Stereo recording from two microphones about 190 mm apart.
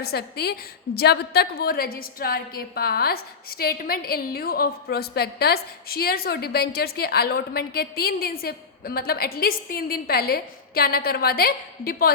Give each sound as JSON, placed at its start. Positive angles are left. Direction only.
{"t": 0.0, "sound": "a woman's voice", "side_deg": 55}